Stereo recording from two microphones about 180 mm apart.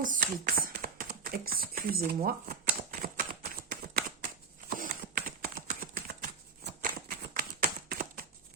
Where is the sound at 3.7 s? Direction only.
55° right (ahead or behind).